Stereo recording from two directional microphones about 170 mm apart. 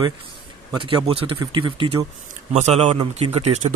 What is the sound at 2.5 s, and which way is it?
Speech, 40° right (ahead or behind).